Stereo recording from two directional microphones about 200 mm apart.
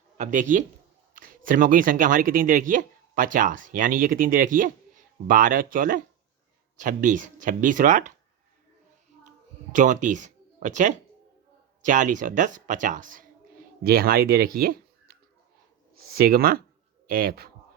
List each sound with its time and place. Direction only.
0.2 s speech: 40° right (ahead or behind)
9.7 s speech: 40° right (ahead or behind)